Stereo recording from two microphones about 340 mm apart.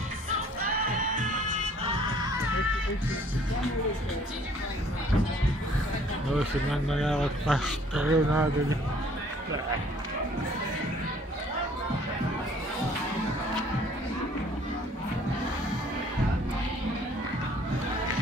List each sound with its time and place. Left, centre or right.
1.1 s music: centre
6.3 s speech: centre